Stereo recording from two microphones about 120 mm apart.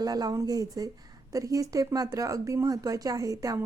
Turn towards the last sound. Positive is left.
turn(degrees=-25)  # may be behind; listen again after turning